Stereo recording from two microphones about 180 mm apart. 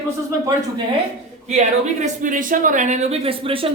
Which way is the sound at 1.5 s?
40° right (ahead or behind).